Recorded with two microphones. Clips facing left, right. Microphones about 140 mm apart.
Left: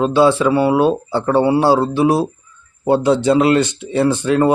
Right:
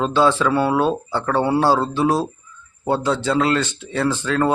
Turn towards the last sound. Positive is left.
turn(degrees=15)  # may be behind; listen again after turning